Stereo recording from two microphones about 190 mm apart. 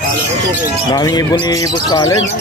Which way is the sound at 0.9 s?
20° left (ahead or behind).